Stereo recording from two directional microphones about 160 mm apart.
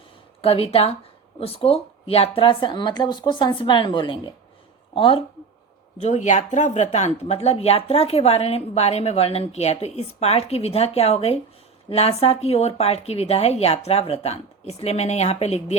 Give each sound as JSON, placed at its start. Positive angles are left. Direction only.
{"t": 0.4, "sound": "speech", "side_deg": 40}
{"t": 6.0, "sound": "speech", "side_deg": 50}